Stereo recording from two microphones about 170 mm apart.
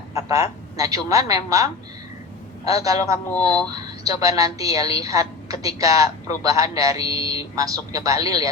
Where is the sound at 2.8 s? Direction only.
20° right (ahead or behind).